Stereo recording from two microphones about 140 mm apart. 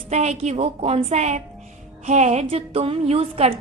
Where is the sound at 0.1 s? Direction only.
50° right (ahead or behind).